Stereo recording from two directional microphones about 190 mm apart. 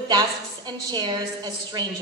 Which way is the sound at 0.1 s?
20° right (ahead or behind).